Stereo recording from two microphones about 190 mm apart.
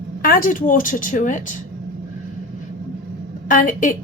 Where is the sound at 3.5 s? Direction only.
45° left (ahead or behind).